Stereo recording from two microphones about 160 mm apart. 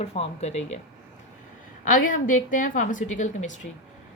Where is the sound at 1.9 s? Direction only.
55° left (ahead or behind).